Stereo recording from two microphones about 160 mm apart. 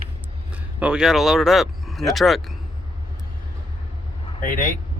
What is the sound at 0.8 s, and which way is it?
Speech, 5° right (ahead or behind).